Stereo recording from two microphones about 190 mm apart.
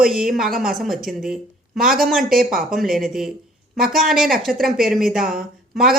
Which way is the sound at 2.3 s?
50° right (ahead or behind).